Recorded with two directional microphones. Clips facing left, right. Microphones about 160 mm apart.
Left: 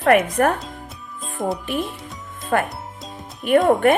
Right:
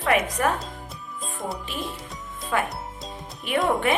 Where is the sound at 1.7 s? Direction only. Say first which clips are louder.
Left 7 dB; 55° left (ahead or behind).